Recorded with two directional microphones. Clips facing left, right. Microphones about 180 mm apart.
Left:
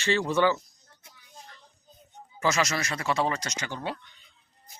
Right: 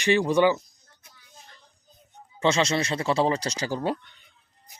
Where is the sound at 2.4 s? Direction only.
30° right (ahead or behind); by 4.1 s 45° right (ahead or behind).